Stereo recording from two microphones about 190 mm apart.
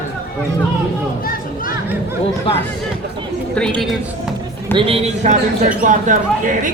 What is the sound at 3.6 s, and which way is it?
Speech, 5° left (ahead or behind).